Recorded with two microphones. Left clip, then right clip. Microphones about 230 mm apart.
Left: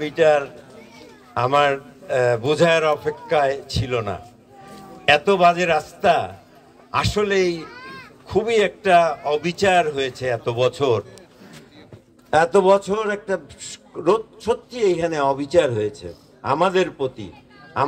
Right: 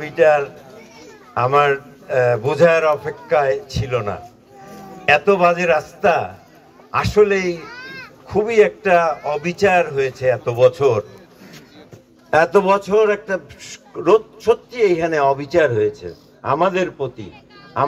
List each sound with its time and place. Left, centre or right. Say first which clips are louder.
0.0 s a man's voice: right 3 dB; left
12.3 s a man's voice: right 1 dB; left